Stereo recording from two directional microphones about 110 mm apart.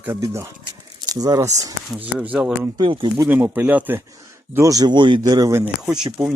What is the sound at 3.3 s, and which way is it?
Speech, 15° right (ahead or behind).